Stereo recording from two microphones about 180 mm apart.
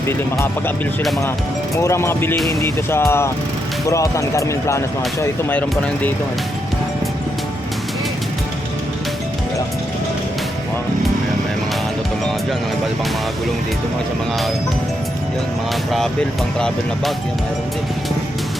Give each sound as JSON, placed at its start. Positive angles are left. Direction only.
{"t": 0.1, "sound": "speech", "side_deg": 15}
{"t": 1.7, "sound": "speech", "side_deg": 15}
{"t": 16.6, "sound": "speech", "side_deg": 0}